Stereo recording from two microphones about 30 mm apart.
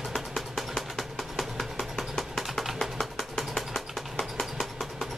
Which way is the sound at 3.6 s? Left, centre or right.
Left.